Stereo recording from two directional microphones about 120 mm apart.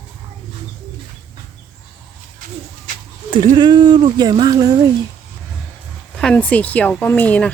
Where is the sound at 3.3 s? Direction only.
40° right (ahead or behind).